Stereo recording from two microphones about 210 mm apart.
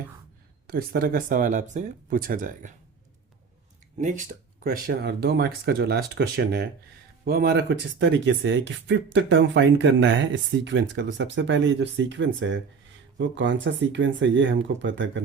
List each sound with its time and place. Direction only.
0.7 s speech: 45° right (ahead or behind)
4.0 s speech: 35° right (ahead or behind); by 15.2 s 60° right (ahead or behind)